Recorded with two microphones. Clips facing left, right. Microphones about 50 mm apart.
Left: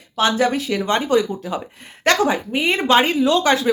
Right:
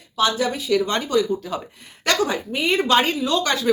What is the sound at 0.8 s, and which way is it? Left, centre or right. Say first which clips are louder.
Speech: left 5 dB; left.